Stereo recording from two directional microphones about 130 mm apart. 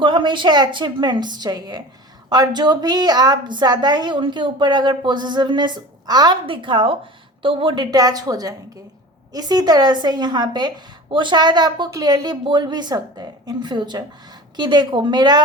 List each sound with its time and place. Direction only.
0.0 s a woman's voice: 40° right (ahead or behind)
7.9 s a woman's voice: 30° right (ahead or behind)